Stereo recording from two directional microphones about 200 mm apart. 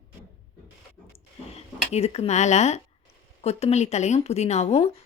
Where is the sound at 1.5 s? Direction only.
30° left (ahead or behind).